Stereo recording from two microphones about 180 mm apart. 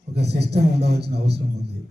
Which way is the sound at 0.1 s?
65° right (ahead or behind).